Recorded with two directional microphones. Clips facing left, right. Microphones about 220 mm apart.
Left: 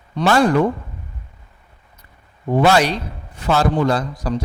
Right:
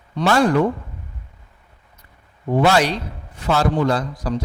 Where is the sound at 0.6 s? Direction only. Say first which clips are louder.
Left 1 dB; 25° left (ahead or behind).